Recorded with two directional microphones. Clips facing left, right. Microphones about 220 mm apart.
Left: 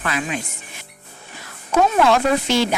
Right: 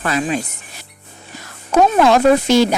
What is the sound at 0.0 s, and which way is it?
Speech, 35° right (ahead or behind).